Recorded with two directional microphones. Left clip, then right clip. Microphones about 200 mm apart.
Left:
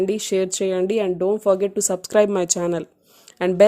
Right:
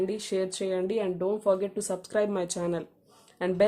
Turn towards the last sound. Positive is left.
turn(degrees=35)  # may be behind; listen again after turning